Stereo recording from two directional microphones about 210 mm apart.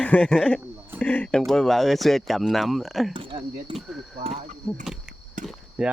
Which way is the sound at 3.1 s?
25° right (ahead or behind).